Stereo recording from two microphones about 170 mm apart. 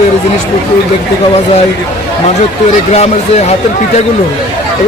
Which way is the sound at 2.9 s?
40° left (ahead or behind).